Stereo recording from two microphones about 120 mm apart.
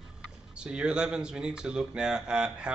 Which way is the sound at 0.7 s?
10° right (ahead or behind).